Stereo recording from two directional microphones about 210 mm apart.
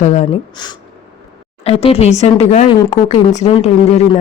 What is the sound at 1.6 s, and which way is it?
Speech, 30° left (ahead or behind).